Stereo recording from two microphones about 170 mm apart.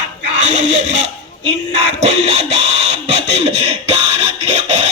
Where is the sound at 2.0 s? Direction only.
40° right (ahead or behind).